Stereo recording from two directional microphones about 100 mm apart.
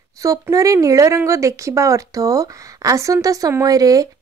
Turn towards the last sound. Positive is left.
turn(degrees=-35)  # may be behind; listen again after turning